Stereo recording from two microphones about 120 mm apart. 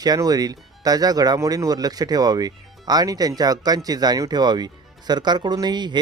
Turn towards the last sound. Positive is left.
turn(degrees=-40)  # may be behind; listen again after turning